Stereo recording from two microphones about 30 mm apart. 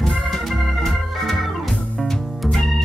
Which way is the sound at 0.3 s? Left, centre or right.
Centre.